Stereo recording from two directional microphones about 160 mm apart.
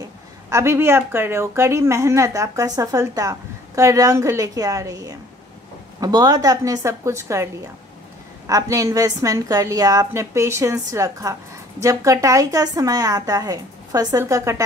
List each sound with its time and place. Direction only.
0.5 s speech: 15° right (ahead or behind)
8.5 s speech: 20° right (ahead or behind)